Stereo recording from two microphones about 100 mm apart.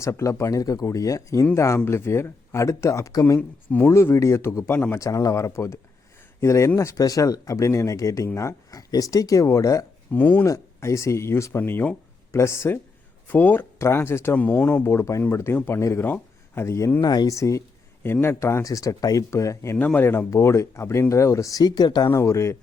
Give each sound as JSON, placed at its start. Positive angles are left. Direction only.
{"t": 0.0, "sound": "speech", "side_deg": 30}
{"t": 3.7, "sound": "speech", "side_deg": 25}
{"t": 10.1, "sound": "chopping", "side_deg": 15}
{"t": 10.4, "sound": "speech", "side_deg": 30}
{"t": 14.8, "sound": "speech", "side_deg": 30}
{"t": 19.7, "sound": "speech", "side_deg": 15}
{"t": 22.1, "sound": "speech", "side_deg": 30}